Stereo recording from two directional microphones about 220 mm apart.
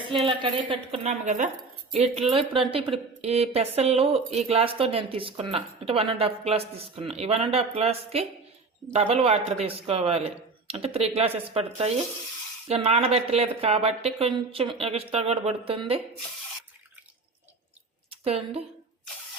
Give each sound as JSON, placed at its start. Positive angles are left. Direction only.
{"t": 0.1, "sound": "speech", "side_deg": -25}
{"t": 18.1, "sound": "a woman's voice", "side_deg": -25}